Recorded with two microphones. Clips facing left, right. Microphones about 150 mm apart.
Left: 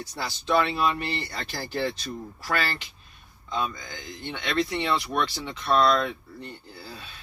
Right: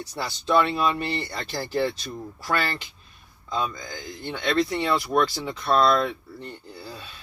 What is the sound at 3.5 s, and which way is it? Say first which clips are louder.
Speech: right 2 dB; 35° right (ahead or behind).